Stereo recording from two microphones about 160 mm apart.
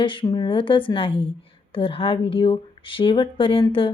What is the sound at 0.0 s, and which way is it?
Speech, 30° left (ahead or behind).